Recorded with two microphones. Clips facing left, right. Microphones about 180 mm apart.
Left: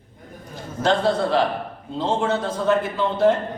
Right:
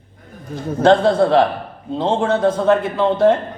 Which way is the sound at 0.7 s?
60° right (ahead or behind).